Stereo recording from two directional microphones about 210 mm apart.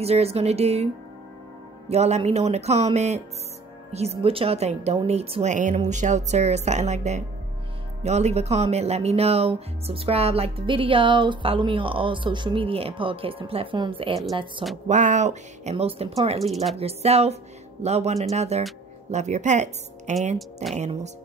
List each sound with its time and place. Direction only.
0.0 s speech: 30° right (ahead or behind)
1.9 s a woman's voice: 30° right (ahead or behind)
14.9 s a woman's voice: 35° right (ahead or behind)